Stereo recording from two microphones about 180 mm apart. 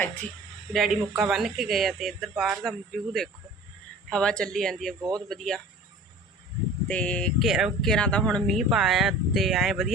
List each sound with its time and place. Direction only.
0.7 s speech: centre (ahead or behind)
4.9 s speech: 20° right (ahead or behind)
5.3 s speech: 5° left (ahead or behind)
6.8 s speech: 5° left (ahead or behind)